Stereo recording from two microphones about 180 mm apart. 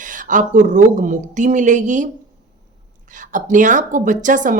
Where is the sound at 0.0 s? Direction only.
45° right (ahead or behind).